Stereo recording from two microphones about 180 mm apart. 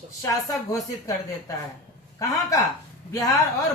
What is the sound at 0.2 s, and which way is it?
Speech, 20° left (ahead or behind).